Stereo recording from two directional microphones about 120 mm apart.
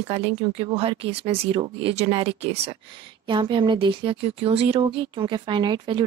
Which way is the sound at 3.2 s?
40° right (ahead or behind).